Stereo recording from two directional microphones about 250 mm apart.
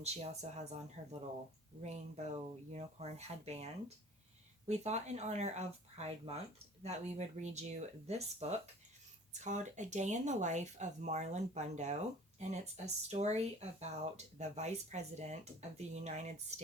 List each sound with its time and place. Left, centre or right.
0.0 s speech: right